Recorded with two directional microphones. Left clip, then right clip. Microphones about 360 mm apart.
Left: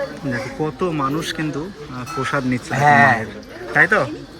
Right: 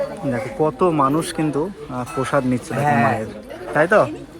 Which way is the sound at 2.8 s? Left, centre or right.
Left.